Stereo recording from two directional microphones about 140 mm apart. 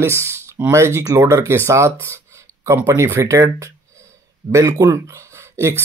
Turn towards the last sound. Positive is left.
turn(degrees=-20)  # may be behind; listen again after turning